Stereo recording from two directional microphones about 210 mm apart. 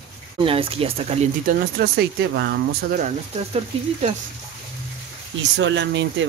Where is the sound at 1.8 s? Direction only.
50° right (ahead or behind).